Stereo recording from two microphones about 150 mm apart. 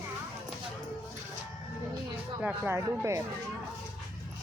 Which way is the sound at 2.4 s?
15° right (ahead or behind).